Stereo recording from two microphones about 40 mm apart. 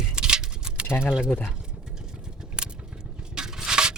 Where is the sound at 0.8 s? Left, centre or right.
Left.